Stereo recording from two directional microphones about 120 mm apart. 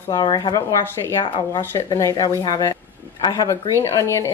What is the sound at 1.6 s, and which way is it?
Speech, 20° left (ahead or behind).